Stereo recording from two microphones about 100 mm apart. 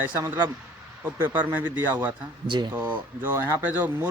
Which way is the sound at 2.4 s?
50° right (ahead or behind).